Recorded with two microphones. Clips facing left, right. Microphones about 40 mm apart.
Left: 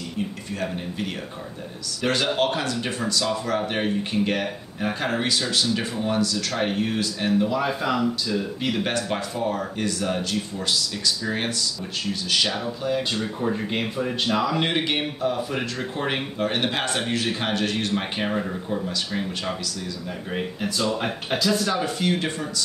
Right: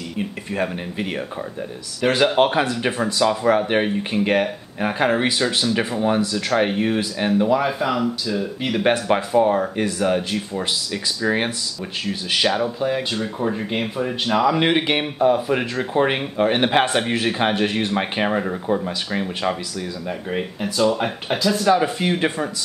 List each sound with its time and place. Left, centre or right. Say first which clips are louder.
0.6 s speech: right 5 dB; right
2.0 s speech: right 6 dB; centre
2.3 s speech: right 6 dB; right
7.6 s speech: right 2 dB; centre
8.8 s speech: right 7 dB; right
20.3 s speech: right 4 dB; centre
21.7 s speech: right 4 dB; centre